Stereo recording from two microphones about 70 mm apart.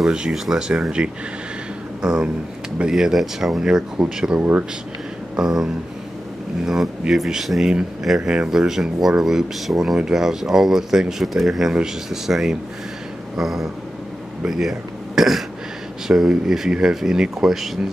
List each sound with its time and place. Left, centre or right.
0.0 s speech: centre
4.4 s speech: right
5.3 s a sound: centre
6.6 s speech: centre